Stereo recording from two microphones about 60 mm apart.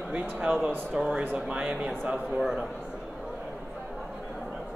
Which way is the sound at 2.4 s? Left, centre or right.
Centre.